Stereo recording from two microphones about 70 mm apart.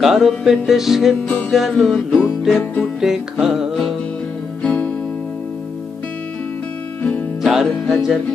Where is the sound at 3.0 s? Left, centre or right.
Centre.